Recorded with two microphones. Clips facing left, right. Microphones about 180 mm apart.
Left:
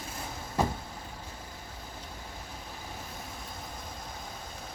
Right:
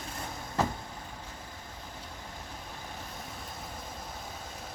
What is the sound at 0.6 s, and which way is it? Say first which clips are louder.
Vehicle: left 1 dB; 10° left (ahead or behind).